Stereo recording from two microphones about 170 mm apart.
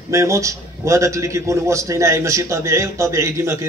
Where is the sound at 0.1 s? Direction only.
15° right (ahead or behind).